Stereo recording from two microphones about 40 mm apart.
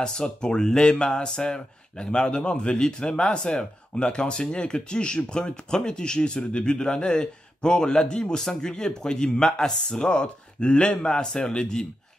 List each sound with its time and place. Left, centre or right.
0.0 s speech: centre